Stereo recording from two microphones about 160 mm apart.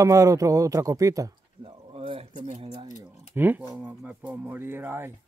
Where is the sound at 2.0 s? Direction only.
35° right (ahead or behind).